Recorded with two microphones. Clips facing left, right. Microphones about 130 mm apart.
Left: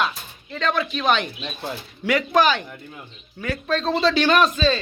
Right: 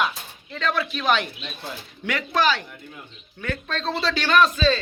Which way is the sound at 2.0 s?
15° left (ahead or behind).